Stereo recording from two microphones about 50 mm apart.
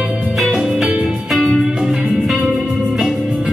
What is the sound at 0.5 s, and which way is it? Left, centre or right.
Music, centre.